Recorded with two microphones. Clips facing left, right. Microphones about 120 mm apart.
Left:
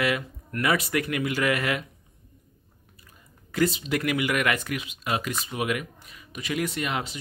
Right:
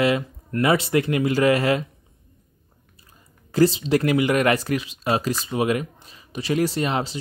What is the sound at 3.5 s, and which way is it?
Speech, 30° right (ahead or behind).